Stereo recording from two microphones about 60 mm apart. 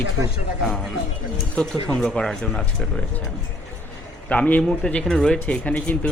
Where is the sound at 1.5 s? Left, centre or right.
Centre.